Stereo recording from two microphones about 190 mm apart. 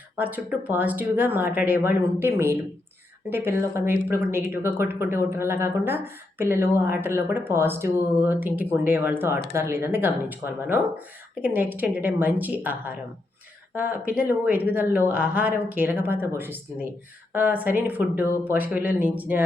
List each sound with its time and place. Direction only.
0.2 s speech: 10° right (ahead or behind)